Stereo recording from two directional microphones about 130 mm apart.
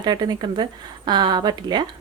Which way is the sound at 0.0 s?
35° right (ahead or behind).